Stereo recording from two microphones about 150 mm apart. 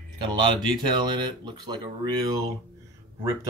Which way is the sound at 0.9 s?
30° right (ahead or behind).